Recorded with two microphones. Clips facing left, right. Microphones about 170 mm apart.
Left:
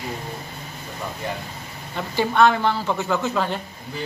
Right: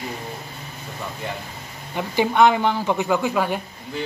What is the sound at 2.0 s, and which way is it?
Speech, 15° right (ahead or behind).